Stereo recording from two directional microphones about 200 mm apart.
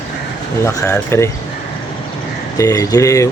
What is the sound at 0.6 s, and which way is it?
Speech, 15° left (ahead or behind).